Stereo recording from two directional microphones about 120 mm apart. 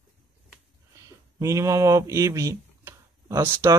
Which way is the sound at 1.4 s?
25° right (ahead or behind).